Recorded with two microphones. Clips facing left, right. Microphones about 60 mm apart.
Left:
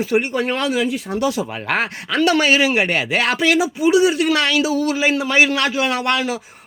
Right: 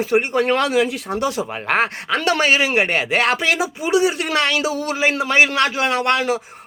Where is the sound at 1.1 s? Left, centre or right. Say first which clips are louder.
Left 1 dB; right.